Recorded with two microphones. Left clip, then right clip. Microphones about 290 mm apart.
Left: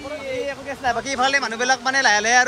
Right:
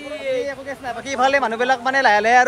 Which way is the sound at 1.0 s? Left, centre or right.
Centre.